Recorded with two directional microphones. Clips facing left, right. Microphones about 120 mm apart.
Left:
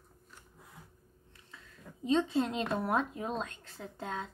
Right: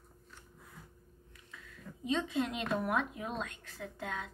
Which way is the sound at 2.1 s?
30° left (ahead or behind).